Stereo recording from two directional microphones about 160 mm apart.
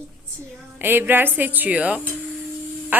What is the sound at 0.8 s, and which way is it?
A woman's voice, 15° right (ahead or behind).